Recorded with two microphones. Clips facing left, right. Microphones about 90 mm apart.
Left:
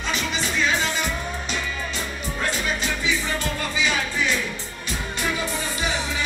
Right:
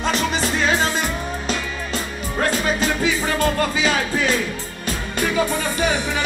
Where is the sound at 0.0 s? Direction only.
45° right (ahead or behind).